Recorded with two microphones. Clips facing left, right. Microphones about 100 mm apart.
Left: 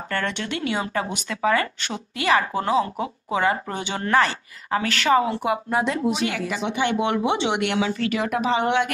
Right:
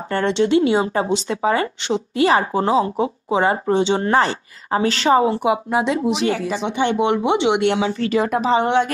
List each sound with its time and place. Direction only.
0.1 s speech: 25° right (ahead or behind)
5.4 s speech: 15° right (ahead or behind)
6.1 s speech: 30° right (ahead or behind)